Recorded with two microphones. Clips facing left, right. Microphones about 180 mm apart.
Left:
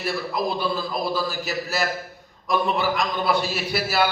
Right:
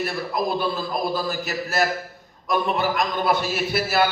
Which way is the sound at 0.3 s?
50° right (ahead or behind).